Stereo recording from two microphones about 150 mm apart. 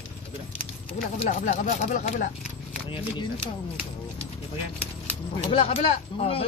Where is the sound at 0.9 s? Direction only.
45° left (ahead or behind).